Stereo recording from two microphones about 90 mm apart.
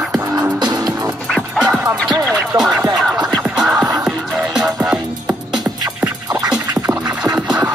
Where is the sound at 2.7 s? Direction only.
45° right (ahead or behind).